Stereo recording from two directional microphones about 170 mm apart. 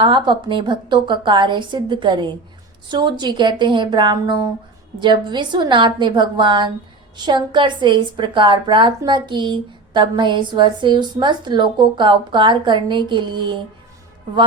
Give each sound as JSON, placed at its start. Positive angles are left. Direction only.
{"t": 0.0, "sound": "a woman's voice", "side_deg": -30}